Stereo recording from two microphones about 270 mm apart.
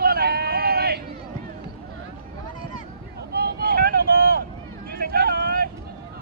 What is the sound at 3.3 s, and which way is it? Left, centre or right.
Vehicle, right.